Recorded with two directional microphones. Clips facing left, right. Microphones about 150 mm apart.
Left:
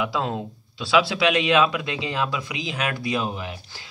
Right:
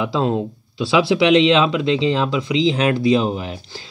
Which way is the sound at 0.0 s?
25° right (ahead or behind).